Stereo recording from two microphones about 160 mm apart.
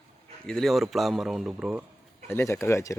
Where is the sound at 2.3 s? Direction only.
15° left (ahead or behind).